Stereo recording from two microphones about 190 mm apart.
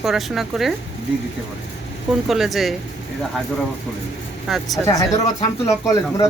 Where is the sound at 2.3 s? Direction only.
Centre (ahead or behind).